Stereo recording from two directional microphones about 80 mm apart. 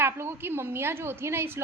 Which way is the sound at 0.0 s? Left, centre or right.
Right.